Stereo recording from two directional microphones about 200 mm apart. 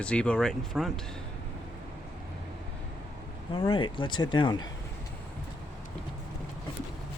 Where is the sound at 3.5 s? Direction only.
25° left (ahead or behind).